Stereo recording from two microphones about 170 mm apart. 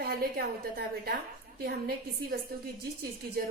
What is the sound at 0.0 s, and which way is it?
A woman's voice, 65° right (ahead or behind).